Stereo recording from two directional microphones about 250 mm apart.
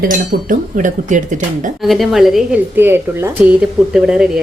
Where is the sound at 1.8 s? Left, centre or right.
Centre.